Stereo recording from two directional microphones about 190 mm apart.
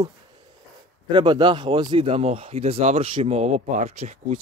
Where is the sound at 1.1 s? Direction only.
25° right (ahead or behind).